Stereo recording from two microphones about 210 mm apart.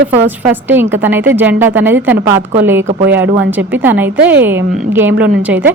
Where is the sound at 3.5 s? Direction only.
10° right (ahead or behind).